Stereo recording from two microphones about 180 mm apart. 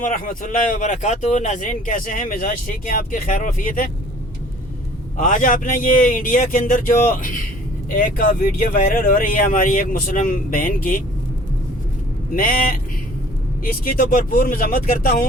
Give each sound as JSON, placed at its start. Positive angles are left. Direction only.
{"t": 0.0, "sound": "speech", "side_deg": 45}
{"t": 5.1, "sound": "speech", "side_deg": 45}
{"t": 12.3, "sound": "speech", "side_deg": 50}
{"t": 13.8, "sound": "speech", "side_deg": 50}